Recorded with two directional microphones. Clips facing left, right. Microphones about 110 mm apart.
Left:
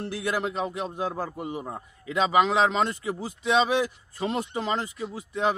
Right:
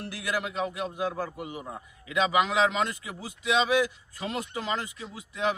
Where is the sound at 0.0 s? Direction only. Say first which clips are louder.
Left 4 dB; 30° left (ahead or behind).